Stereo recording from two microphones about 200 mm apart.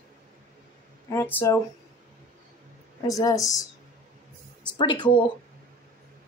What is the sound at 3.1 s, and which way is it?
Speech, 15° left (ahead or behind).